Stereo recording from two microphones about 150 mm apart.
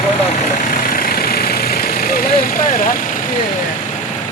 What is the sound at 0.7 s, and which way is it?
Vehicle, 75° left (ahead or behind).